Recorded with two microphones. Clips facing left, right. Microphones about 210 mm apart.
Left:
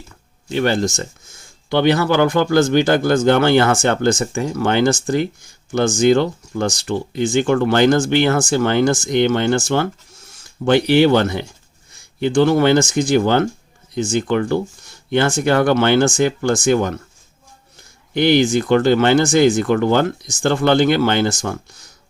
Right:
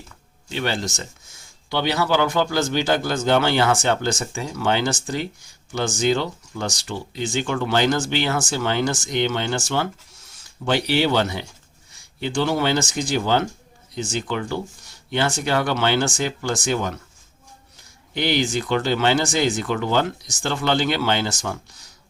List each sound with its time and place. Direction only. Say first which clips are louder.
0.4 s speech: left 8 dB; 50° left (ahead or behind)
18.1 s speech: left 8 dB; 50° left (ahead or behind)